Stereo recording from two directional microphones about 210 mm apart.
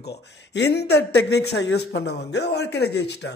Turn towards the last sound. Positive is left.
turn(degrees=55)  # may be behind; listen again after turning